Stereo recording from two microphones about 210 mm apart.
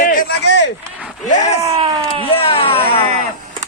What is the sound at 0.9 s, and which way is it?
Speech, 5° right (ahead or behind).